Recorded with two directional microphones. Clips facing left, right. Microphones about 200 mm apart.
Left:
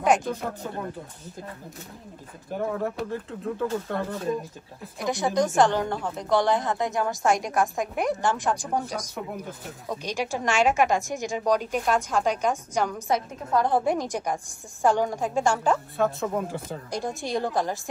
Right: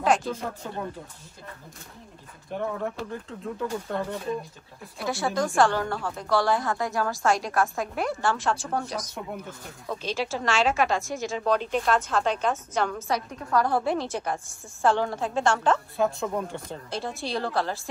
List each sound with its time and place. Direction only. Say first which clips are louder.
0.0 s speech: left 1 dB; 15° left (ahead or behind)
2.5 s speech: left 2 dB; centre (ahead or behind)
4.9 s a woman's voice: left 3 dB; 15° left (ahead or behind)
13.1 s speech: left 2 dB; 20° left (ahead or behind); by 16.7 s centre (ahead or behind)
16.9 s speech: left 2 dB; 15° left (ahead or behind)